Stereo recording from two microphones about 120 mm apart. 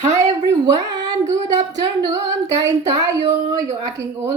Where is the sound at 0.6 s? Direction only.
35° right (ahead or behind).